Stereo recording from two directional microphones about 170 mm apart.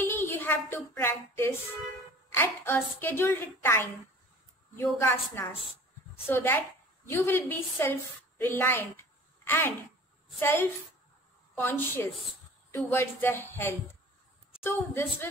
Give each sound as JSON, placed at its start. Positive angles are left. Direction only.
{"t": 0.0, "sound": "a sound", "side_deg": 15}
{"t": 0.9, "sound": "a woman's voice", "side_deg": 15}
{"t": 5.0, "sound": "a woman's voice", "side_deg": 15}